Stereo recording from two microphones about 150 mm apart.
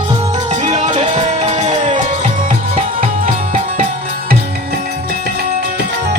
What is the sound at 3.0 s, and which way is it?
Music, 60° right (ahead or behind).